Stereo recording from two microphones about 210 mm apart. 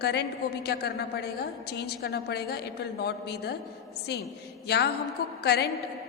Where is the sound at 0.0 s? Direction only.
50° left (ahead or behind).